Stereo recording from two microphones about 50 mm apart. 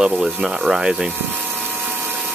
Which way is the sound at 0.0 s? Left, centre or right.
Centre.